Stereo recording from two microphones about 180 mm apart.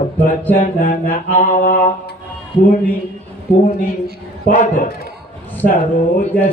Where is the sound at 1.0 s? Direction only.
45° left (ahead or behind).